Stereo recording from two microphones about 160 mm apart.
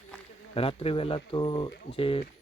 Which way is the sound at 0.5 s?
35° left (ahead or behind).